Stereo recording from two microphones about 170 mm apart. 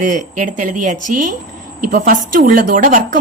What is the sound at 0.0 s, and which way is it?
A woman's voice, 50° right (ahead or behind).